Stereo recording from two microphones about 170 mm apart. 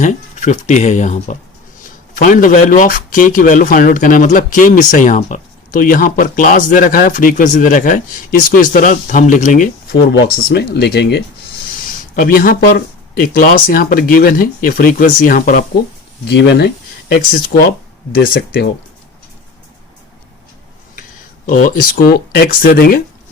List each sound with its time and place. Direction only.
0.0 s a man's voice: 45° left (ahead or behind)
10.1 s speech: 75° left (ahead or behind)
12.1 s speech: 55° left (ahead or behind)
16.2 s speech: 90° left
17.5 s a man's voice: 50° left (ahead or behind)
18.1 s speech: 80° left
21.8 s speech: 55° left (ahead or behind)